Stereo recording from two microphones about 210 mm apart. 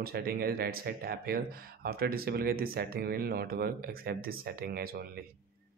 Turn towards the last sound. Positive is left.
turn(degrees=-45)  # may be behind; listen again after turning